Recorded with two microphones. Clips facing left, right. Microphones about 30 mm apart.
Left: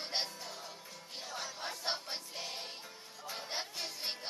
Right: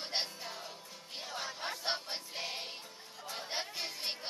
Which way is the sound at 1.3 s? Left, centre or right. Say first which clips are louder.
Right 2 dB; centre.